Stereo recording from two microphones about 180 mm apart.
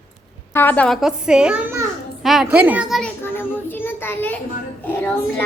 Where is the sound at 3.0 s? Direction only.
10° left (ahead or behind).